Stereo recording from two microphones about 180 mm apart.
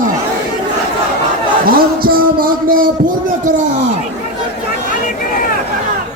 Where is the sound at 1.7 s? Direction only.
55° right (ahead or behind).